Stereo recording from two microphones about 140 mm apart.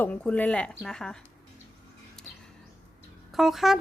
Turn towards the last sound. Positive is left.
turn(degrees=0)  # may be behind; listen again after turning